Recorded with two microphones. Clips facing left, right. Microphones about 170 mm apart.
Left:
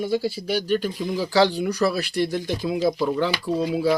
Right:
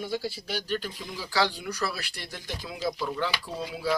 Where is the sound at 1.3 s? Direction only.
30° left (ahead or behind).